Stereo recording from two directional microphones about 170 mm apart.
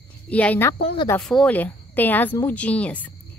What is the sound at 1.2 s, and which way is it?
Speech, 5° left (ahead or behind).